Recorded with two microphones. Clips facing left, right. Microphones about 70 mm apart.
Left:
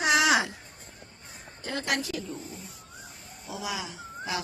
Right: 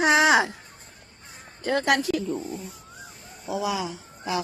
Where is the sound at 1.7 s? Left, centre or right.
Right.